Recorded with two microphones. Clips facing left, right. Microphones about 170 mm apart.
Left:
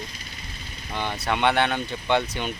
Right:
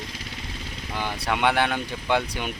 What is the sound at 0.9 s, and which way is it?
Speech, 10° right (ahead or behind).